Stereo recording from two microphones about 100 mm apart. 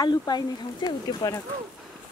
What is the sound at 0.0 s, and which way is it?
Speech, 45° left (ahead or behind).